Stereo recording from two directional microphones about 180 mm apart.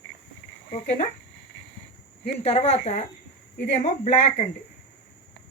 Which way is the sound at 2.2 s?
35° left (ahead or behind).